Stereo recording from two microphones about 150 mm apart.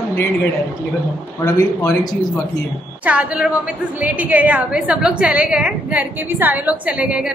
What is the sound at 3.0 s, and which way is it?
A woman's voice, 10° right (ahead or behind).